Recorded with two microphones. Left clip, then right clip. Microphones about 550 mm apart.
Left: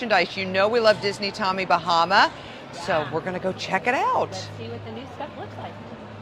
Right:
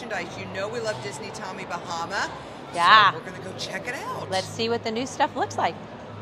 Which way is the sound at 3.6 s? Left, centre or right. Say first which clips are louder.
Left 9 dB; left.